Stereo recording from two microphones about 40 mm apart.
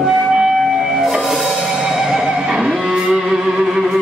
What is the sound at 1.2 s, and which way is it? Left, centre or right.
Music, centre.